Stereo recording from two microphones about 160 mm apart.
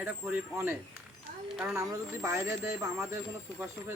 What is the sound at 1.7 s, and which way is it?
Speech, 20° right (ahead or behind).